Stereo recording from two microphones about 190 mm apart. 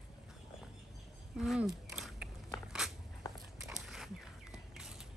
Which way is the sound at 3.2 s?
20° left (ahead or behind).